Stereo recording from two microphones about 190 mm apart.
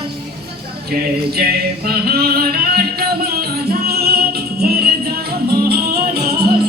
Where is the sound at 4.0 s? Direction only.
55° right (ahead or behind).